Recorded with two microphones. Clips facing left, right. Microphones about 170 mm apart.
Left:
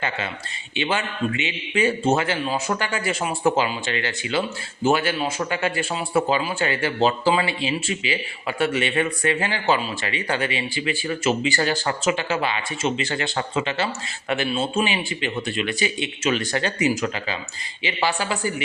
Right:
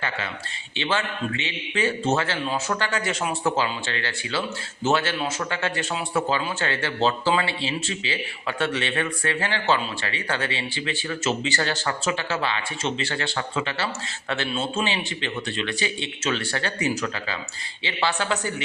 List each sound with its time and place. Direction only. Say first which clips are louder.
0.8 s speech: left 2 dB; 15° left (ahead or behind)
3.4 s speech: left 5 dB; 15° left (ahead or behind)